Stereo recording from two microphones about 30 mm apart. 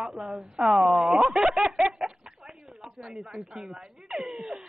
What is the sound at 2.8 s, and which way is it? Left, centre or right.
Speech, right.